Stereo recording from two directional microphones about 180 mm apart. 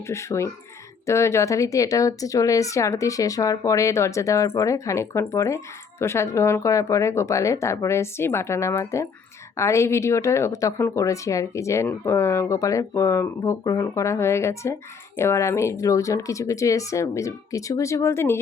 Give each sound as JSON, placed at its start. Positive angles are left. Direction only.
{"t": 0.1, "sound": "a woman's voice", "side_deg": 15}